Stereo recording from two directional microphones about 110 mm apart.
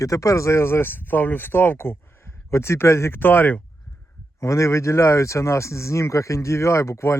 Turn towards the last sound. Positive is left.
turn(degrees=25)  # may be behind; listen again after turning